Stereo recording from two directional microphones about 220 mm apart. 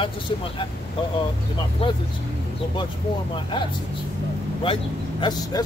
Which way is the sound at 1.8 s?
25° left (ahead or behind).